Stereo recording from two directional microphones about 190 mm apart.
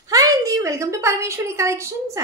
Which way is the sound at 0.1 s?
20° right (ahead or behind).